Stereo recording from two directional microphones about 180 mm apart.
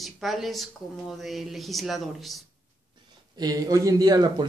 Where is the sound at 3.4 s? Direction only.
20° right (ahead or behind).